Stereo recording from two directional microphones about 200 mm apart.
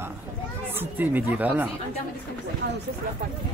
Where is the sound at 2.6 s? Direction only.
60° right (ahead or behind).